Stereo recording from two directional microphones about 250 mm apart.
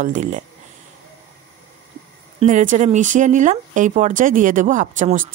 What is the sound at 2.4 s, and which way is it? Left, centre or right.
Speech, right.